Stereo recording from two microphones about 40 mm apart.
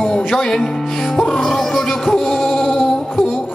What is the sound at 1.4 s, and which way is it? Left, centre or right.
Music, centre.